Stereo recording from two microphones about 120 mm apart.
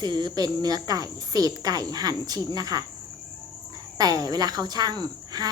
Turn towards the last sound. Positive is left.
turn(degrees=-35)  # may be behind; listen again after turning